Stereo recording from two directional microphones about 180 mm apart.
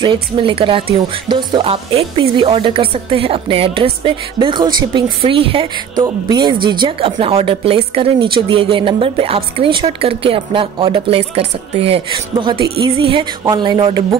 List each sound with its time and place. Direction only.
0.0 s speech: 25° right (ahead or behind)